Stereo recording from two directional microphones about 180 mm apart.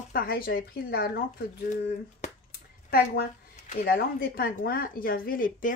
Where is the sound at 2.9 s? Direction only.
60° left (ahead or behind).